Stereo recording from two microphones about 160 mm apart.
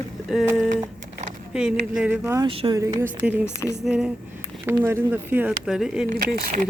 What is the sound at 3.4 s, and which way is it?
Speech, 15° left (ahead or behind).